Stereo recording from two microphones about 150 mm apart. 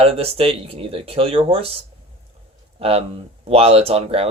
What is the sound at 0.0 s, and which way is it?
Speech, 40° right (ahead or behind).